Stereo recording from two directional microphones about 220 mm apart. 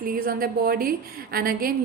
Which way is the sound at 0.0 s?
40° right (ahead or behind).